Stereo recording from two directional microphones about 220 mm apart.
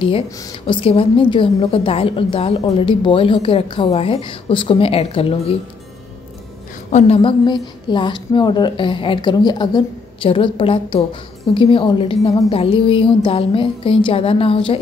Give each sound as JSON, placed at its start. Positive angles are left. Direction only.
{"t": 0.0, "sound": "a woman's voice", "side_deg": 25}
{"t": 6.9, "sound": "a woman's voice", "side_deg": 30}